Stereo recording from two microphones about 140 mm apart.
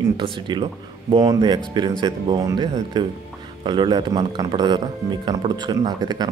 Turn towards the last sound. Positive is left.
turn(degrees=-30)  # may be behind; listen again after turning